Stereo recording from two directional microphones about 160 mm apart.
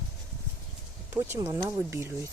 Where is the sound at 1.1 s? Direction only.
15° right (ahead or behind).